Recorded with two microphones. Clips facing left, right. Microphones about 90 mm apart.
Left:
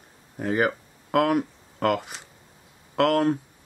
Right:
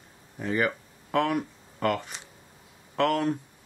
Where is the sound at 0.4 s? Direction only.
40° left (ahead or behind).